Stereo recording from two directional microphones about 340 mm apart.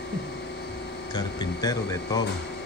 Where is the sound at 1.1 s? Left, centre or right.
Centre.